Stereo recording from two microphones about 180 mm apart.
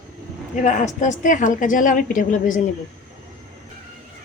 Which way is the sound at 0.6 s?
45° left (ahead or behind).